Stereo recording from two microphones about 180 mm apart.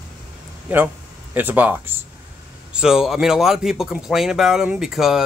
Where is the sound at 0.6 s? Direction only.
10° right (ahead or behind).